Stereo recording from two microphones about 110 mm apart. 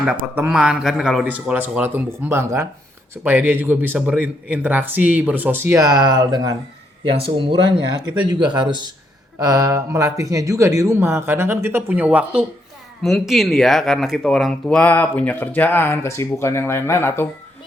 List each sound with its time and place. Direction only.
0.3 s speech: 15° right (ahead or behind)
5.8 s speech: 40° right (ahead or behind)
7.2 s speech: 50° right (ahead or behind); by 12.5 s 10° right (ahead or behind)
13.0 s speech: centre (ahead or behind); by 17.2 s 20° left (ahead or behind)